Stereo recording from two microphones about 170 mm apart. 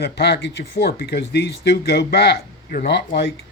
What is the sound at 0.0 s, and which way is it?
A man's voice, 70° left (ahead or behind).